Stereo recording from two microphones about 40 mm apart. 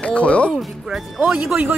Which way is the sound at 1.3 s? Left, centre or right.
Centre.